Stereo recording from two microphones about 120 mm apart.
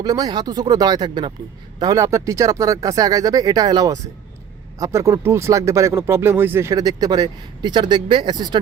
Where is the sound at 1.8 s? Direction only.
30° right (ahead or behind).